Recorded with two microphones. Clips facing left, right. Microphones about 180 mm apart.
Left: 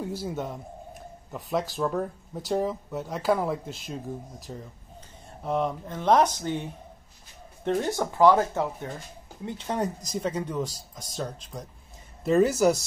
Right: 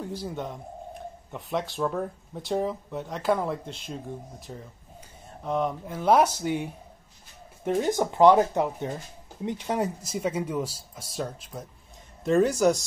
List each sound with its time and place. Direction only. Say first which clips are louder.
0.0 s a man's voice: left 2 dB; 10° left (ahead or behind); by 8.9 s 20° right (ahead or behind)
9.5 s speech: right 1 dB; 10° right (ahead or behind)